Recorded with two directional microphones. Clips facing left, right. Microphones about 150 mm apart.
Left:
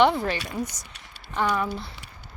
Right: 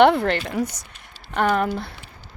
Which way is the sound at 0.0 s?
60° right (ahead or behind).